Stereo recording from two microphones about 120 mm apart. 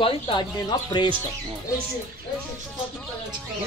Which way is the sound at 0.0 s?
45° left (ahead or behind).